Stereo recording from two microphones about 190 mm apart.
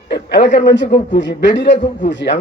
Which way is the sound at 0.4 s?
40° left (ahead or behind).